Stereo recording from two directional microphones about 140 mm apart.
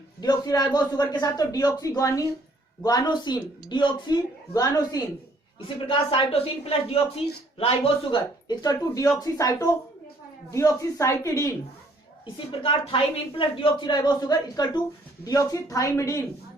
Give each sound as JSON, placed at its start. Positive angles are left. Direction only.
{"t": 0.2, "sound": "a man's voice", "side_deg": 30}
{"t": 5.5, "sound": "a woman's voice", "side_deg": 35}
{"t": 12.2, "sound": "a woman's voice", "side_deg": 40}